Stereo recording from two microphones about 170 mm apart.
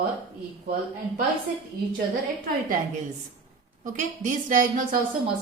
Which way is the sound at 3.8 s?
50° right (ahead or behind).